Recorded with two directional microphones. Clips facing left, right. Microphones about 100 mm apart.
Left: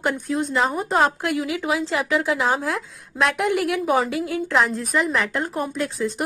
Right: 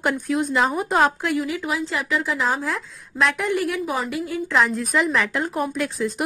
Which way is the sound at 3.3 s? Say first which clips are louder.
Left 2 dB; 80° left.